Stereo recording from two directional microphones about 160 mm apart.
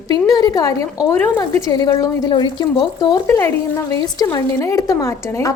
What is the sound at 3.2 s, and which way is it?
A woman's voice, 15° left (ahead or behind).